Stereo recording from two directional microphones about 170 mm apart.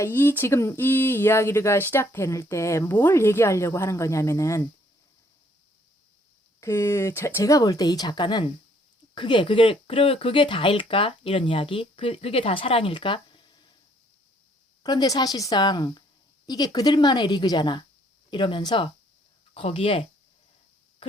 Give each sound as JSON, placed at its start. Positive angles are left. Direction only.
{"t": 0.0, "sound": "speech", "side_deg": 15}
{"t": 6.6, "sound": "speech", "side_deg": 15}
{"t": 14.8, "sound": "speech", "side_deg": 20}